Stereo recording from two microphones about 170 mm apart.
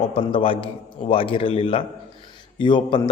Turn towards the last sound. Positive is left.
turn(degrees=30)  # may be behind; listen again after turning